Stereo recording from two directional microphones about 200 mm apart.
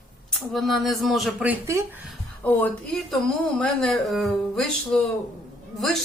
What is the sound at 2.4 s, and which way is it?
Speech, 10° left (ahead or behind).